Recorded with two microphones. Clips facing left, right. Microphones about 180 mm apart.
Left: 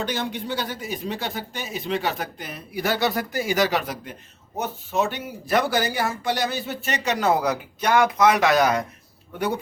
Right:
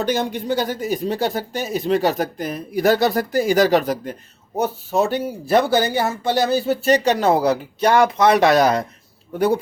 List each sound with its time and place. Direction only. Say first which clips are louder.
0.0 s speech: right 6 dB; 45° right (ahead or behind)